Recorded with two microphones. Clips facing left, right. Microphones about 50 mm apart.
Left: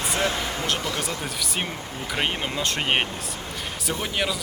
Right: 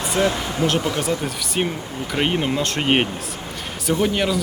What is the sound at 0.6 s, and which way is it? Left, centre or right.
Speech, centre.